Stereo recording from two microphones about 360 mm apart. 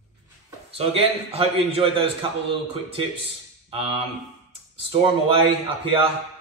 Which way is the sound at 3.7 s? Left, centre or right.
Centre.